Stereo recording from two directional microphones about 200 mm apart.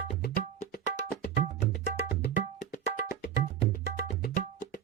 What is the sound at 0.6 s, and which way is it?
Music, 35° left (ahead or behind).